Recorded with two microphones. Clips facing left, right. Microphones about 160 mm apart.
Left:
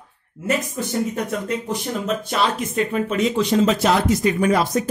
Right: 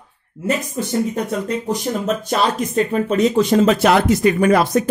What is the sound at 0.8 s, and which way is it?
Speech, 30° right (ahead or behind).